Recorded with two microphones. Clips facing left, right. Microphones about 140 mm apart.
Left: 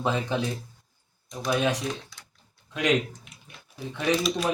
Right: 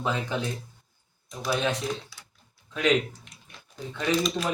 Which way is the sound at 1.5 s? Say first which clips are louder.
Left 2 dB; 10° left (ahead or behind).